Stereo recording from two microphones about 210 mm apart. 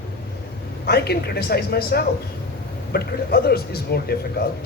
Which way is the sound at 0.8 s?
50° left (ahead or behind).